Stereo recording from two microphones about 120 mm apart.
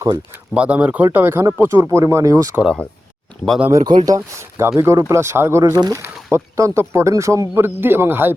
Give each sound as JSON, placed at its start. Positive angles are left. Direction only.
{"t": 0.5, "sound": "speech", "side_deg": -10}
{"t": 3.7, "sound": "speech", "side_deg": -30}